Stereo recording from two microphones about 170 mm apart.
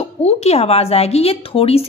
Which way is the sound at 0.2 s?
40° left (ahead or behind).